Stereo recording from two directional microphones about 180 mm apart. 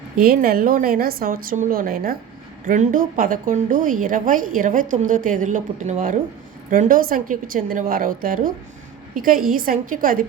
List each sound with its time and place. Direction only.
0.2 s a woman's voice: 55° right (ahead or behind)